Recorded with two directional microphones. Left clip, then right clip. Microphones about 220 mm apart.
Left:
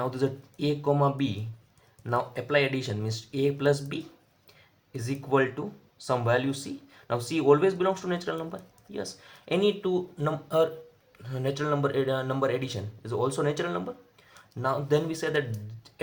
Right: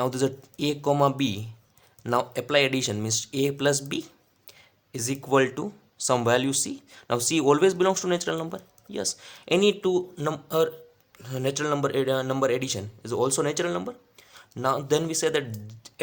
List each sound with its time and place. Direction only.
0.0 s speech: 40° right (ahead or behind)